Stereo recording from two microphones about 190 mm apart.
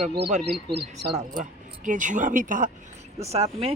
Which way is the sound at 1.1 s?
40° right (ahead or behind).